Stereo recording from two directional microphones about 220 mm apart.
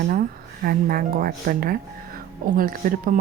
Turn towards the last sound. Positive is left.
turn(degrees=-40)  # may be behind; listen again after turning